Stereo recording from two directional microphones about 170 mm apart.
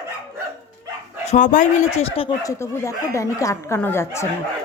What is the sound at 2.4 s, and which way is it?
Speech, 20° left (ahead or behind).